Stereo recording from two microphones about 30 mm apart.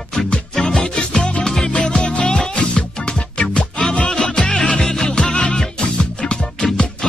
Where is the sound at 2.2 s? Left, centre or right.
Left.